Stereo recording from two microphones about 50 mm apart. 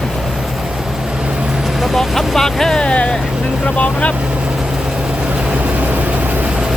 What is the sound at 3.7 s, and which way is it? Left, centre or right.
Vehicle, left.